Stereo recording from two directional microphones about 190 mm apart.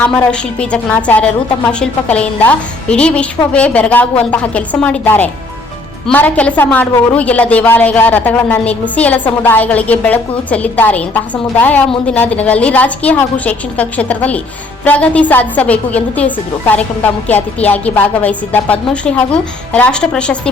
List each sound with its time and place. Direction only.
0.0 s a woman's voice: 5° left (ahead or behind)